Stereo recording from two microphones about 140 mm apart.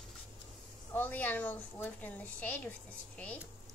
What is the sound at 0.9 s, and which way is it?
A woman's voice, 10° left (ahead or behind).